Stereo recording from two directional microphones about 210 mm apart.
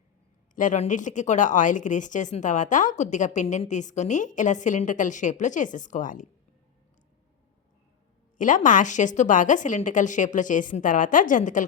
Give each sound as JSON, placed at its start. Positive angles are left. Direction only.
{"t": 0.5, "sound": "speech", "side_deg": 35}
{"t": 8.4, "sound": "speech", "side_deg": 40}